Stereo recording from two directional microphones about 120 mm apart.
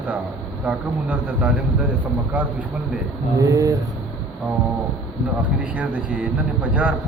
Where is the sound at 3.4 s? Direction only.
25° right (ahead or behind).